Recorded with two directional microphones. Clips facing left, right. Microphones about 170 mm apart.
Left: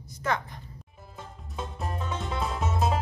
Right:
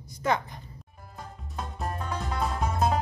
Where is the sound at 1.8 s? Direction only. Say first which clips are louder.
Right 1 dB; centre (ahead or behind).